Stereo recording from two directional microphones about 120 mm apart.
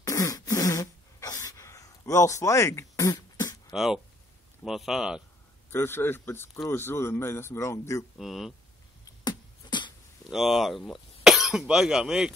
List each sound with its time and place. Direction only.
0.0 s throat clearing: 30° left (ahead or behind)
3.7 s speech: centre (ahead or behind)
5.7 s speech: 20° left (ahead or behind)
8.2 s speech: 5° right (ahead or behind)
9.2 s beatboxing: 35° left (ahead or behind)
10.3 s speech: centre (ahead or behind)